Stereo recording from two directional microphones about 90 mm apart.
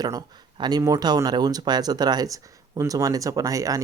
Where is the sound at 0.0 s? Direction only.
45° right (ahead or behind).